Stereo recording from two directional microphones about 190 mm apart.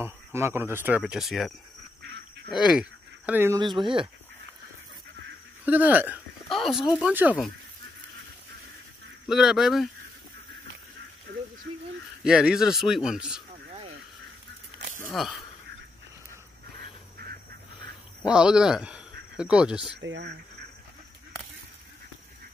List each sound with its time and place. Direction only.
0.0 s speech: 10° right (ahead or behind)
2.6 s speech: 5° right (ahead or behind)
3.6 s speech: 25° right (ahead or behind)
5.7 s speech: 10° right (ahead or behind)
9.3 s speech: centre (ahead or behind)
12.2 s speech: 5° right (ahead or behind)
15.1 s speech: centre (ahead or behind)
18.2 s speech: 5° right (ahead or behind)
20.0 s speech: 70° right (ahead or behind)